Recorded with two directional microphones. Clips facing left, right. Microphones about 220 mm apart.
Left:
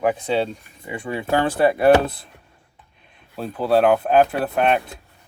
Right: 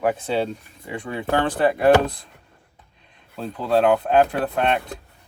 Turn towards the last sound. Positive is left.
turn(degrees=5)  # may be behind; listen again after turning